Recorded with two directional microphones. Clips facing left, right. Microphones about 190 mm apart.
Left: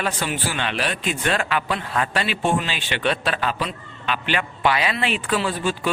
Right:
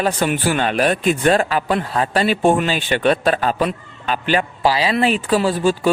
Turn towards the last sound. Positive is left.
turn(degrees=-40)  # may be behind; listen again after turning